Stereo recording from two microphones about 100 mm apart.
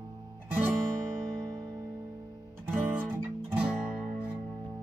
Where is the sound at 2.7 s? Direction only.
15° right (ahead or behind).